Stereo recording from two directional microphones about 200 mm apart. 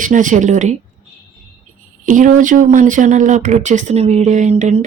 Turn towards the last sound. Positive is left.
turn(degrees=-35)  # may be behind; listen again after turning